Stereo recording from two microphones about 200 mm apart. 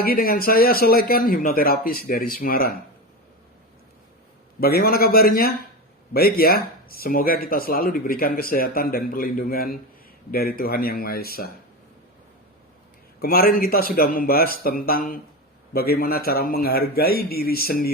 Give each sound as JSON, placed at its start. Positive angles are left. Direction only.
{"t": 0.0, "sound": "speech", "side_deg": 45}
{"t": 4.6, "sound": "speech", "side_deg": 50}
{"t": 13.2, "sound": "speech", "side_deg": 50}